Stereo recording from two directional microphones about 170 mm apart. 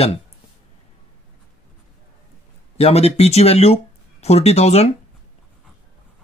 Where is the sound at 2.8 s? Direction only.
35° left (ahead or behind).